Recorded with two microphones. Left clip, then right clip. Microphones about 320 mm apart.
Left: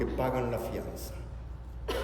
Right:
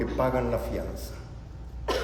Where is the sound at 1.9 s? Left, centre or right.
Centre.